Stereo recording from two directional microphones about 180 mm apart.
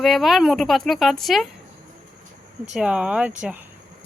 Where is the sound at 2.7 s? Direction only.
5° right (ahead or behind).